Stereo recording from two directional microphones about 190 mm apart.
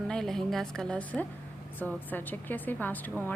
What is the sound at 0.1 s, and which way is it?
A woman's voice, centre (ahead or behind).